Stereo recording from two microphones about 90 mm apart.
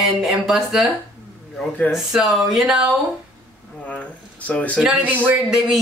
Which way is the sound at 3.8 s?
15° left (ahead or behind).